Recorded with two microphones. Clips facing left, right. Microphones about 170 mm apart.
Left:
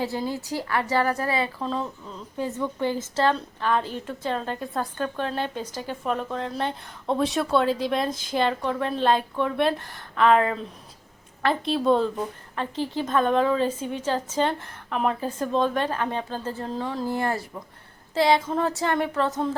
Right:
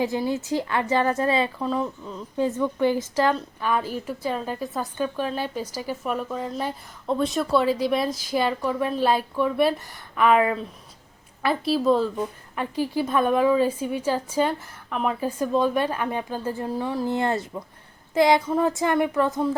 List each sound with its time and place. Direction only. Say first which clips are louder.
0.0 s a woman's voice: right 3 dB; 15° right (ahead or behind)